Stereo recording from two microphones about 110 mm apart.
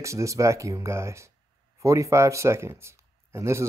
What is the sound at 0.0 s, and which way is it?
Speech, 30° right (ahead or behind).